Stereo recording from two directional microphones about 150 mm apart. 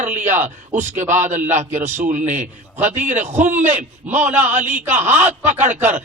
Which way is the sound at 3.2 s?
55° right (ahead or behind).